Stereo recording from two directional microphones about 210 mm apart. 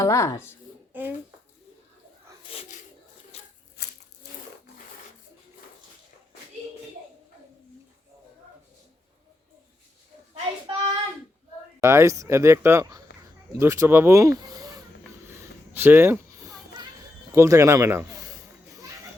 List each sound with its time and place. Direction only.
0.0 s speech: 15° left (ahead or behind)
0.9 s speech: 10° right (ahead or behind)
2.4 s a sound: 25° left (ahead or behind)
3.3 s tearing: 30° left (ahead or behind)
3.8 s insect: 50° left (ahead or behind)
10.3 s child singing: 25° right (ahead or behind)
11.8 s speech: 15° right (ahead or behind)
15.3 s a sound: 10° right (ahead or behind)
17.3 s children playing: 15° right (ahead or behind)